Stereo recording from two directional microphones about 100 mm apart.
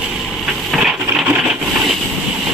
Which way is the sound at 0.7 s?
5° right (ahead or behind).